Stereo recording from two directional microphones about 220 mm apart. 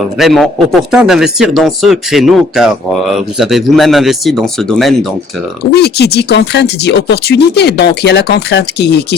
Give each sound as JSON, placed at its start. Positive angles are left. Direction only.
{"t": 0.2, "sound": "speech", "side_deg": 0}
{"t": 5.7, "sound": "speech", "side_deg": 50}